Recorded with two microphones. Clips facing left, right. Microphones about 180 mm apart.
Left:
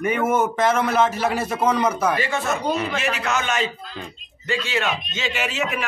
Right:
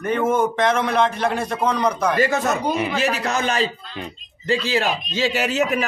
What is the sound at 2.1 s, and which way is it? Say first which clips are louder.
Speech: right 4 dB; 40° right (ahead or behind).